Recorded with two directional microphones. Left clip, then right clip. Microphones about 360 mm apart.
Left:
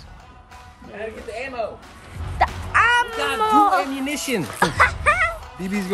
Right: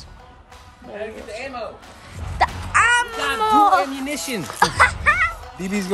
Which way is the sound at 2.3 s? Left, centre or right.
Centre.